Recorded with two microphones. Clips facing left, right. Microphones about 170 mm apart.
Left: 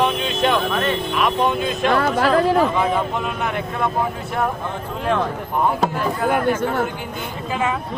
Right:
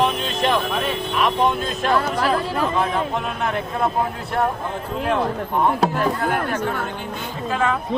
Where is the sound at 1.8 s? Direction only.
65° left (ahead or behind).